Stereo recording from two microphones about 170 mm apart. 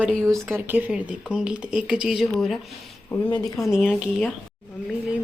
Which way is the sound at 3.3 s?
20° left (ahead or behind).